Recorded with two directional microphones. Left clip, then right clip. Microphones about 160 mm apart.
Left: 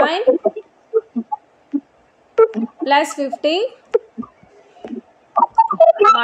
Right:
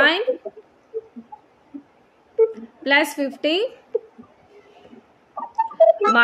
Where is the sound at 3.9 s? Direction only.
55° left (ahead or behind).